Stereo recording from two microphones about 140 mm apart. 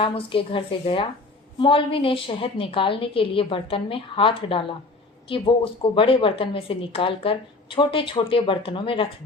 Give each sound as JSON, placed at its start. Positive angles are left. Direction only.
{"t": 0.0, "sound": "a woman's voice", "side_deg": 40}